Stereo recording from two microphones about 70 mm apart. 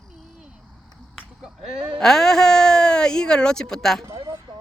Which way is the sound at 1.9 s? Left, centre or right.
Centre.